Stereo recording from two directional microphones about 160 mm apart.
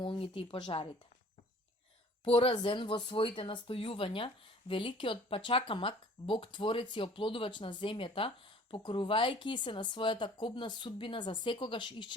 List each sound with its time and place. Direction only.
0.0 s speech: 35° left (ahead or behind)
2.2 s speech: 35° left (ahead or behind)